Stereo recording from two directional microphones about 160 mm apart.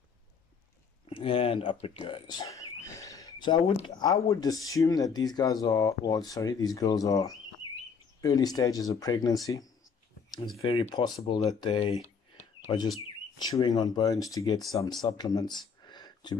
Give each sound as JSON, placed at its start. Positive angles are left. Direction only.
{"t": 1.0, "sound": "speech", "side_deg": 35}
{"t": 10.6, "sound": "speech", "side_deg": 35}
{"t": 15.9, "sound": "a sound", "side_deg": 25}